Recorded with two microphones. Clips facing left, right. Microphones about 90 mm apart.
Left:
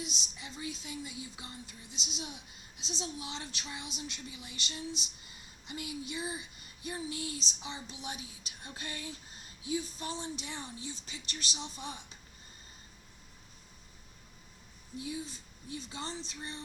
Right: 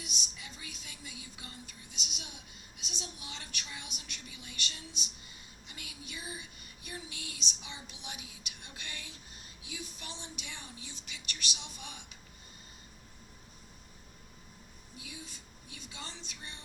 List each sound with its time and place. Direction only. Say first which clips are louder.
0.0 s a woman's voice: left 3 dB; 30° left (ahead or behind)
14.9 s speech: left 10 dB; 30° left (ahead or behind)